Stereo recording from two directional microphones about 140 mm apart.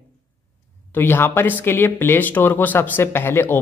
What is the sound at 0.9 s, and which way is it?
A man's voice, 15° left (ahead or behind).